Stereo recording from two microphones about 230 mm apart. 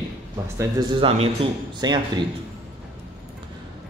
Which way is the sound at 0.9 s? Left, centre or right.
Right.